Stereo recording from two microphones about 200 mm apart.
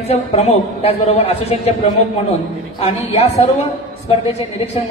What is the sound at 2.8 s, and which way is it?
A woman's voice, 35° left (ahead or behind).